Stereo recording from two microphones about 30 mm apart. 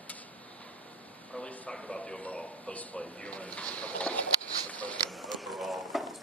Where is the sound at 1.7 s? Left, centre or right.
Left.